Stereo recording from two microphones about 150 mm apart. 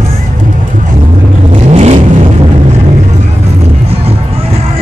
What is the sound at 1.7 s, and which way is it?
Vehicle, 45° right (ahead or behind).